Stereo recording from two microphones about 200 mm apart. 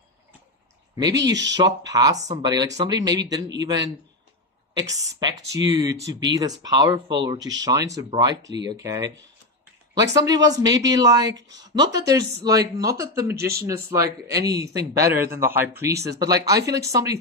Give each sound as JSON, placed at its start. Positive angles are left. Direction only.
{"t": 0.9, "sound": "speech", "side_deg": -20}